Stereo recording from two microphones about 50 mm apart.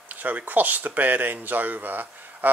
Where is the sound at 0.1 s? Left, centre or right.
Right.